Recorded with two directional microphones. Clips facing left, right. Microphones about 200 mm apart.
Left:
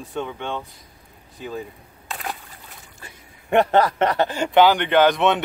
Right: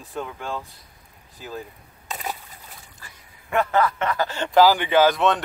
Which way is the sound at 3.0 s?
30° left (ahead or behind).